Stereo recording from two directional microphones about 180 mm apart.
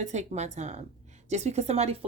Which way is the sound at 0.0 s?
40° right (ahead or behind).